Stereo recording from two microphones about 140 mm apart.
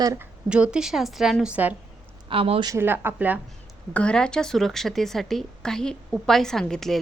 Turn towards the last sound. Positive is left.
turn(degrees=5)  # may be behind; listen again after turning